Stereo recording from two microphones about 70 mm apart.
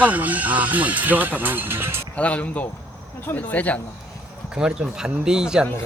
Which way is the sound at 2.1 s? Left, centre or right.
Centre.